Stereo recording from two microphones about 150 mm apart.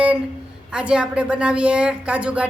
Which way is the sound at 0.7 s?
5° right (ahead or behind).